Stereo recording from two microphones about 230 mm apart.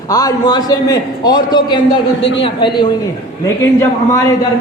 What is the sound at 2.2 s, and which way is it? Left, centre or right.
Speech, left.